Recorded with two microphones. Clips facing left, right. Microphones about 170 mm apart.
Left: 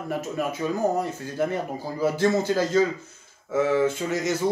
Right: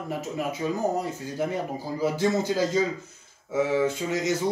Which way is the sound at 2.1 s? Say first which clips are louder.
Left 3 dB; 15° right (ahead or behind).